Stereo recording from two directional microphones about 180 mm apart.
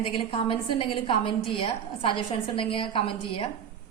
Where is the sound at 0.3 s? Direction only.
30° left (ahead or behind).